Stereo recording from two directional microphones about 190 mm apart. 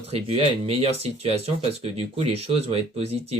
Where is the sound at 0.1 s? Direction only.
30° right (ahead or behind).